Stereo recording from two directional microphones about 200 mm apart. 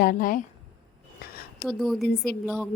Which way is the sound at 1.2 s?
50° left (ahead or behind).